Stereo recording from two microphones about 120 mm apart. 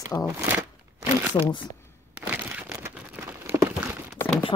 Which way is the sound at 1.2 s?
15° right (ahead or behind).